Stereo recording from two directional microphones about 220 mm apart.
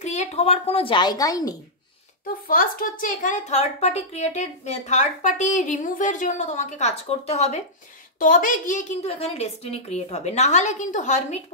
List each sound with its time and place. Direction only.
0.0 s a child's voice: 30° left (ahead or behind); by 1.5 s 15° left (ahead or behind)
2.4 s a woman's voice: 40° left (ahead or behind)